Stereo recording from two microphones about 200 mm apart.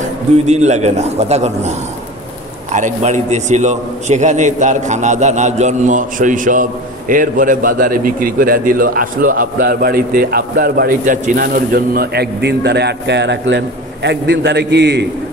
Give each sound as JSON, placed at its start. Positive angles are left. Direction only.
{"t": 0.5, "sound": "a man's voice", "side_deg": -35}